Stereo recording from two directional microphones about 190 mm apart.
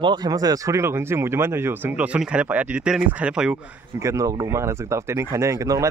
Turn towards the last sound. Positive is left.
turn(degrees=-15)  # may be behind; listen again after turning